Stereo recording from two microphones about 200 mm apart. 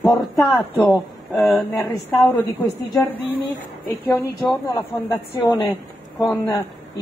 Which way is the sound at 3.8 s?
10° left (ahead or behind).